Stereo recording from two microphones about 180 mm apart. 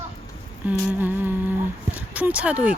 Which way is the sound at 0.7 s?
10° right (ahead or behind).